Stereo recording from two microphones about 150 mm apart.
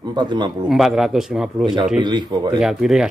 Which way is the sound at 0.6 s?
Centre (ahead or behind).